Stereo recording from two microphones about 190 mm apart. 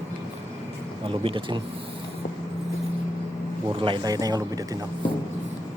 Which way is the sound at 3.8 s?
25° right (ahead or behind).